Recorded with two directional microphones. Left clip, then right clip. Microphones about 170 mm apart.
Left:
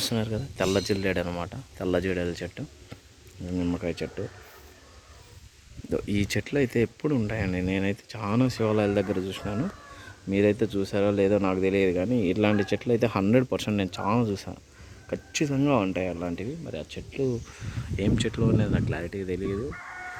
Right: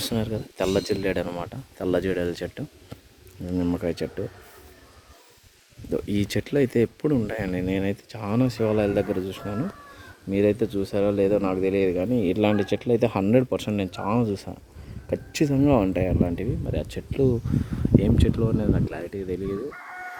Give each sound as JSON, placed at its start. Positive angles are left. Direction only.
{"t": 0.0, "sound": "speech", "side_deg": -10}
{"t": 6.1, "sound": "speech", "side_deg": -15}
{"t": 15.1, "sound": "speech", "side_deg": -25}
{"t": 16.7, "sound": "speech", "side_deg": -35}
{"t": 17.9, "sound": "speech", "side_deg": -10}